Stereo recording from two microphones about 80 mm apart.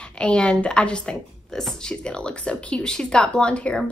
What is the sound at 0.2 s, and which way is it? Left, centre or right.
A woman's voice, centre.